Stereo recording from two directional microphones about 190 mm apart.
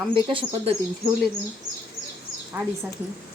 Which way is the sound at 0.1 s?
25° right (ahead or behind).